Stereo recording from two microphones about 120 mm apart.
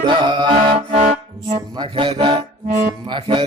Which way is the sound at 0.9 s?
75° right (ahead or behind).